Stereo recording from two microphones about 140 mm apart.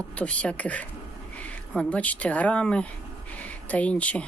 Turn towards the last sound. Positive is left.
turn(degrees=10)  # may be behind; listen again after turning